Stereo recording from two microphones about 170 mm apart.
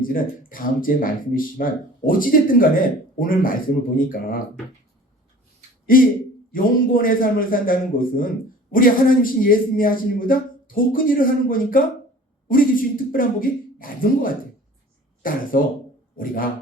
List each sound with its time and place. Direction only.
0.0 s speech: 55° left (ahead or behind)
6.5 s speech: 55° left (ahead or behind)